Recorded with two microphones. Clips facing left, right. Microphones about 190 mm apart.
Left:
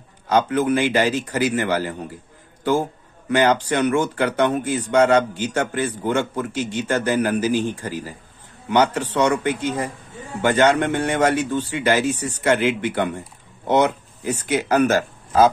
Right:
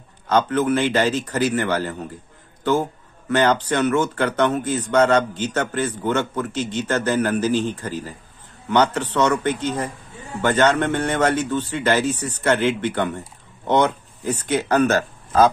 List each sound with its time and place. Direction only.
0.3 s speech: 10° left (ahead or behind)